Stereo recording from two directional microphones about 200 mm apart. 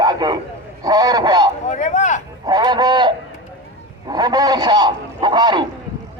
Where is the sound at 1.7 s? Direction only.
35° left (ahead or behind).